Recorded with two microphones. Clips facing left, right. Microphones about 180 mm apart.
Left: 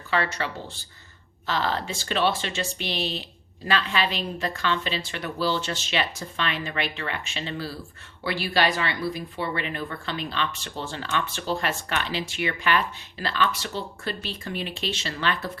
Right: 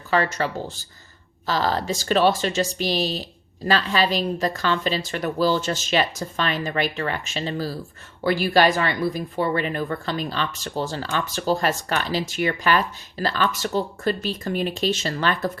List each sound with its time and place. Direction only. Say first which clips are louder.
0.1 s speech: right 5 dB; 40° right (ahead or behind)